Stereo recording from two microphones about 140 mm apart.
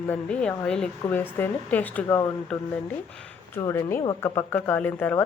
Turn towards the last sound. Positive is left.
turn(degrees=10)  # may be behind; listen again after turning